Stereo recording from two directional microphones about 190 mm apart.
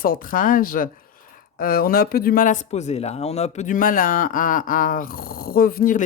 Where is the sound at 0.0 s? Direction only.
50° left (ahead or behind).